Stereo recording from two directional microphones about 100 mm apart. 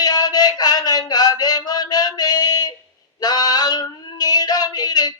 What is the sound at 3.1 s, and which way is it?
Female singing, 40° left (ahead or behind).